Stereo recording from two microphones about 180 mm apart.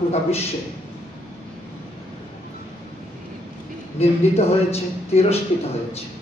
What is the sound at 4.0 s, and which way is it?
Speech, 35° left (ahead or behind).